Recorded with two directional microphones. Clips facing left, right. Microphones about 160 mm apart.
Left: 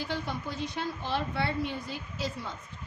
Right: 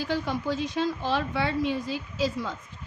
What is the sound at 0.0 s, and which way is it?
A woman's voice, 90° right.